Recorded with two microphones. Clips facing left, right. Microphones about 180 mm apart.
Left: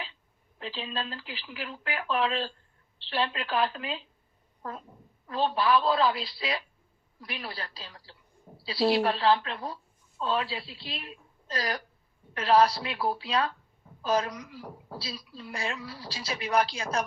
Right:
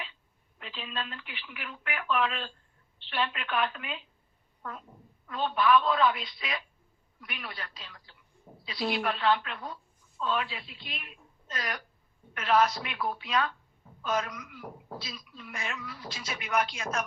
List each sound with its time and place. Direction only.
0.6 s a woman's voice: 30° left (ahead or behind)